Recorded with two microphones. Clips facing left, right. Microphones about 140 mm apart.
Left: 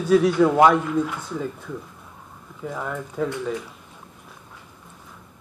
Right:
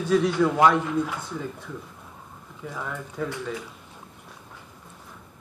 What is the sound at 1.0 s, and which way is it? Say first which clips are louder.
Speech: left 3 dB; 15° left (ahead or behind).